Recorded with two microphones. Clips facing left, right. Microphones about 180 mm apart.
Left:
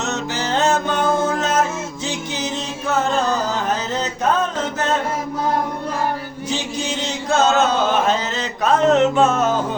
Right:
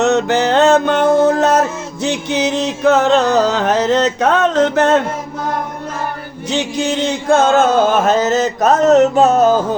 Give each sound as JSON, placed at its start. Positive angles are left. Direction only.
{"t": 0.0, "sound": "music", "side_deg": -65}
{"t": 6.7, "sound": "chant", "side_deg": -60}